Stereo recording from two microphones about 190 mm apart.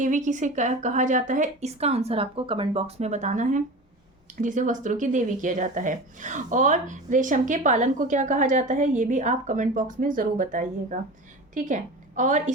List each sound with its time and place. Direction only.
0.0 s a woman's voice: 40° right (ahead or behind)